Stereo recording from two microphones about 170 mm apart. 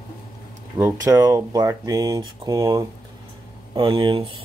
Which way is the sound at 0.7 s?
15° right (ahead or behind).